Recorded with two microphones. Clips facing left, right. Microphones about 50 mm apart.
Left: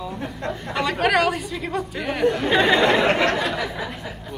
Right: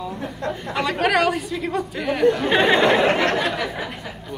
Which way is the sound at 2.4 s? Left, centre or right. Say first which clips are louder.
Right 1 dB; right.